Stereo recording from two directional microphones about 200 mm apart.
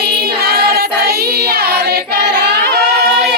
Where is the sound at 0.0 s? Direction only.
50° right (ahead or behind).